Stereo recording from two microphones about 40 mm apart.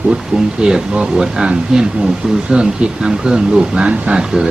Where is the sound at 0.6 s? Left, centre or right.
Centre.